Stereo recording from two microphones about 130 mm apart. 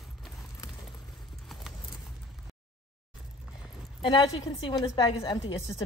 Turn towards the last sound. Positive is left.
turn(degrees=30)  # may be behind; listen again after turning